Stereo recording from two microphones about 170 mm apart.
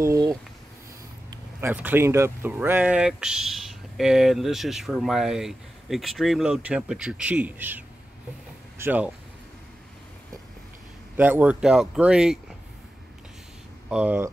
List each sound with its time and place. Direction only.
0.0 s speech: 20° right (ahead or behind)
1.6 s speech: 10° right (ahead or behind)
11.1 s speech: 10° right (ahead or behind)
13.8 s speech: 10° right (ahead or behind)